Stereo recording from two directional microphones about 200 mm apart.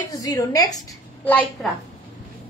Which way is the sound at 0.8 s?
5° left (ahead or behind).